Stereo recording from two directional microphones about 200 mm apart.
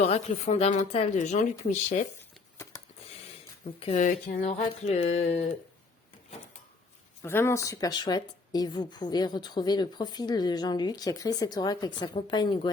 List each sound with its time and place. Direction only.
0.0 s speech: 35° left (ahead or behind)
3.8 s speech: 35° left (ahead or behind)
7.2 s speech: 10° left (ahead or behind)